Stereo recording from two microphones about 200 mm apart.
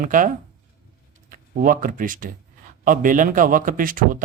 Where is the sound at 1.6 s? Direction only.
45° right (ahead or behind).